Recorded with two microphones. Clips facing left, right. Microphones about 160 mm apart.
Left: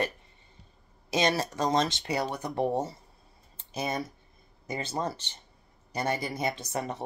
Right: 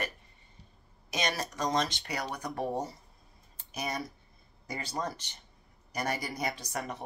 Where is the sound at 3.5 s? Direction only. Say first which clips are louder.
Left 4 dB; 25° left (ahead or behind).